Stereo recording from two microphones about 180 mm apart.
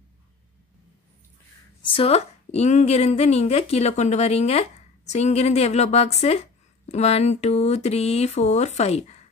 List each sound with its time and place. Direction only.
1.8 s a woman's voice: 30° left (ahead or behind)